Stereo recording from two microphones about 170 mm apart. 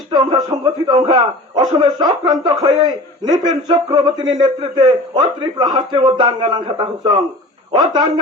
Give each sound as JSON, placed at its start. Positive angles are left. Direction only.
{"t": 0.1, "sound": "a man's voice", "side_deg": -25}